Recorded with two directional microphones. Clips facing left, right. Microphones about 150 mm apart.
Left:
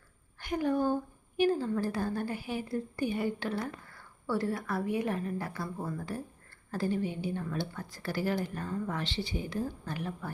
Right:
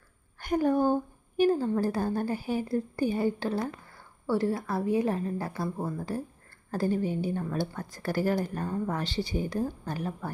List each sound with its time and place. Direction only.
0.3 s a sound: 45° right (ahead or behind)
1.4 s a woman's voice: 35° right (ahead or behind)
6.7 s a woman's voice: 40° right (ahead or behind)